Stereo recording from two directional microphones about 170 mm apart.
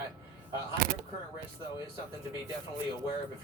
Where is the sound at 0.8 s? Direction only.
55° right (ahead or behind).